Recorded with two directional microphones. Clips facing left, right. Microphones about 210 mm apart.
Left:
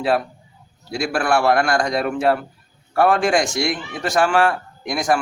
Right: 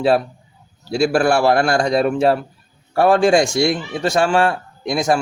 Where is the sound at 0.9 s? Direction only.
30° right (ahead or behind).